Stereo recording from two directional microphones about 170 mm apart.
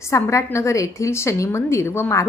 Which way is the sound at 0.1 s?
15° left (ahead or behind).